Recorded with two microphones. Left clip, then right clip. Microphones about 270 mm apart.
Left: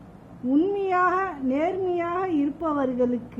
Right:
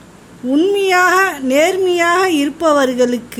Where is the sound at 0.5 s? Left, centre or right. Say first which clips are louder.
Right 10 dB; centre.